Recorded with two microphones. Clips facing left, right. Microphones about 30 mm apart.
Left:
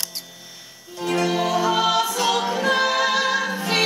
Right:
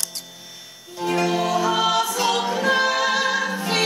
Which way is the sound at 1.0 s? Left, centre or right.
Centre.